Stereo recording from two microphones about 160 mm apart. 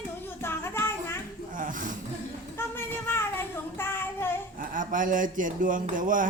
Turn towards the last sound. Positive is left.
turn(degrees=-55)  # may be behind; listen again after turning